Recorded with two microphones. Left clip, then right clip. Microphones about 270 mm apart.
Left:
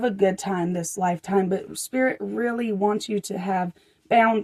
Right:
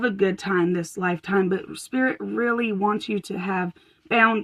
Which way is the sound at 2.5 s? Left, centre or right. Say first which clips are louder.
Even; centre.